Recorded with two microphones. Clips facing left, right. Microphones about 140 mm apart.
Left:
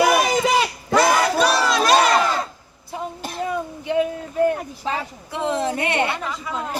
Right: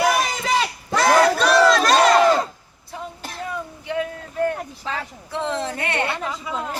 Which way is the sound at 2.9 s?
15° left (ahead or behind).